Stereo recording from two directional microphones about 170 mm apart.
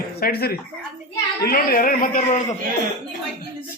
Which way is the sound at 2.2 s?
45° left (ahead or behind).